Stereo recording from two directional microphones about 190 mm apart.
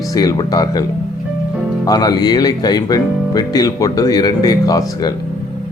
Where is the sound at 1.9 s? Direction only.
20° left (ahead or behind).